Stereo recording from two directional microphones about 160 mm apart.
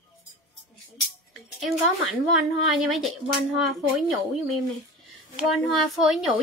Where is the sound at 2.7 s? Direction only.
Centre (ahead or behind).